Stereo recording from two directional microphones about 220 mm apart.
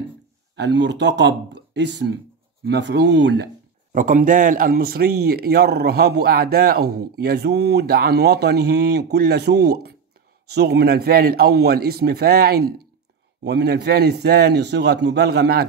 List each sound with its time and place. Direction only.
0.6 s a man's voice: 55° right (ahead or behind)
3.9 s a man's voice: 35° right (ahead or behind)